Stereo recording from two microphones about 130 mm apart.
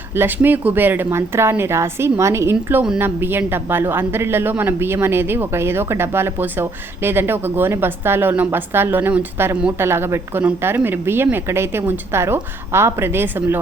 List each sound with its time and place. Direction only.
0.1 s speech: 15° right (ahead or behind)